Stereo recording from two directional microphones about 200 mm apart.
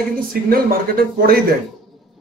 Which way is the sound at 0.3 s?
45° right (ahead or behind).